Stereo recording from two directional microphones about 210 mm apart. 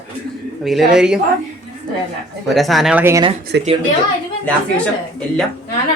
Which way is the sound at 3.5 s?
55° right (ahead or behind).